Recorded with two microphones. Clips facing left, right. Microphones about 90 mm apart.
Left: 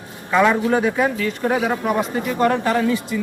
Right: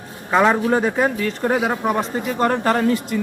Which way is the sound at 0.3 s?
30° right (ahead or behind).